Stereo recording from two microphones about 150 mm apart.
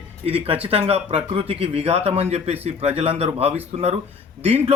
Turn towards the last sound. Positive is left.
turn(degrees=-40)  # may be behind; listen again after turning